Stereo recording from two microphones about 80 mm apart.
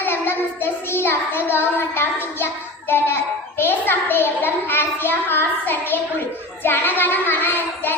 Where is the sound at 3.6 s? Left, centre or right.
Left.